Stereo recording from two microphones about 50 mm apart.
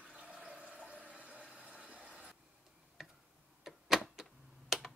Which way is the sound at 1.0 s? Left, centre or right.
Right.